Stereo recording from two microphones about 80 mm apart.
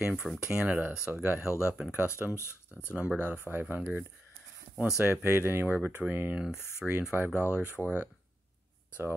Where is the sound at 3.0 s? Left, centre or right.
Centre.